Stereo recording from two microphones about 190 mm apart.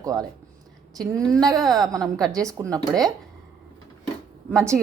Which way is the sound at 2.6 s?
20° right (ahead or behind).